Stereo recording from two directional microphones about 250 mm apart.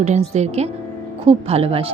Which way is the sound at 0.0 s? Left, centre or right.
Right.